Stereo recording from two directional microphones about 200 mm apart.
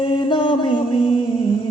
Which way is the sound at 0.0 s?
25° left (ahead or behind).